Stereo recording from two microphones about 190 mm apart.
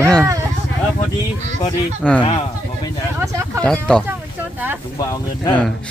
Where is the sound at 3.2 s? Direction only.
15° right (ahead or behind).